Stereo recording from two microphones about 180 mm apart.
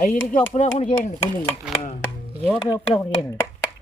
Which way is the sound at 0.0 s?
40° left (ahead or behind).